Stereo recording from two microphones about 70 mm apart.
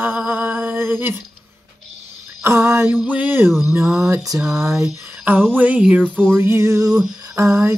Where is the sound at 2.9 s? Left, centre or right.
Right.